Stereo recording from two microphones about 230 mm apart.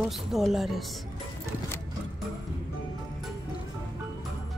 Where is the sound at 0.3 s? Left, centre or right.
Centre.